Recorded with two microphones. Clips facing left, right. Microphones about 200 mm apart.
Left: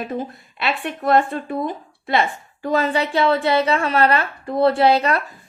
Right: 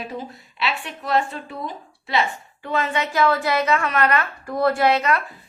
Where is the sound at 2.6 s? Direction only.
40° left (ahead or behind).